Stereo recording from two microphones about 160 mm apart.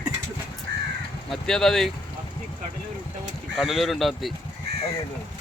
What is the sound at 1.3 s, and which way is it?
Speech, centre (ahead or behind).